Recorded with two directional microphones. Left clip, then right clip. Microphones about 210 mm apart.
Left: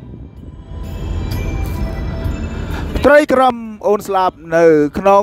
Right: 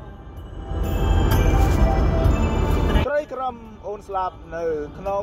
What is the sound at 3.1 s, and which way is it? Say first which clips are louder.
A man's voice: left 15 dB; 55° left (ahead or behind).